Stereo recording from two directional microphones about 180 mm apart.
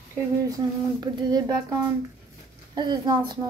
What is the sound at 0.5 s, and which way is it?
Speech, 20° right (ahead or behind).